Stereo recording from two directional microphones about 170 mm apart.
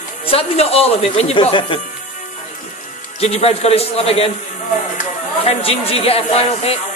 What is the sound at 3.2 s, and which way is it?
A woman's voice, 40° left (ahead or behind).